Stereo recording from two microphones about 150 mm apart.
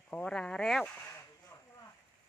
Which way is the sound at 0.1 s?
5° left (ahead or behind).